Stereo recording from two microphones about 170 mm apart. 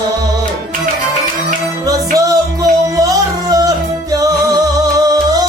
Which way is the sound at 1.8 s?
20° right (ahead or behind).